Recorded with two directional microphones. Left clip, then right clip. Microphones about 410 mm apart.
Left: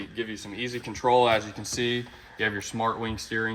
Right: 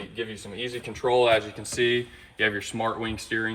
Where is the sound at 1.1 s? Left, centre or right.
Centre.